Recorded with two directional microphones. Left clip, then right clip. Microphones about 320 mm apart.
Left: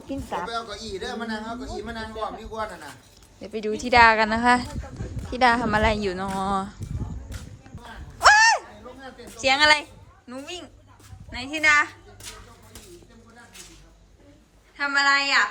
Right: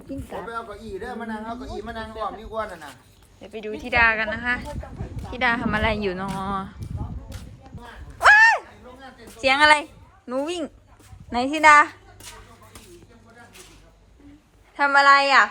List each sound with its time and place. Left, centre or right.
0.4 s a man's voice: centre
3.4 s a woman's voice: centre
8.2 s a sound: centre
9.4 s a woman's voice: centre
14.8 s a woman's voice: centre